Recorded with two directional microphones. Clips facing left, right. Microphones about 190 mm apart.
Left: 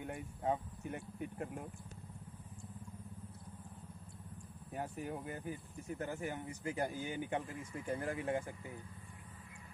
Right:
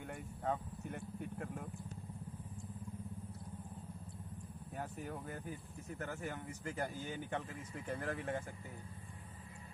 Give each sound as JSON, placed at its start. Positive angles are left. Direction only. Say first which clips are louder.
{"t": 0.0, "sound": "speech", "louder": "left 2 dB", "side_deg": 15}
{"t": 4.7, "sound": "speech", "louder": "left 3 dB", "side_deg": 10}
{"t": 5.9, "sound": "speech", "louder": "left 2 dB", "side_deg": 15}